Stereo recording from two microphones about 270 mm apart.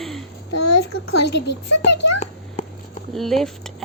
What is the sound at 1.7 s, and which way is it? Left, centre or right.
Speech, left.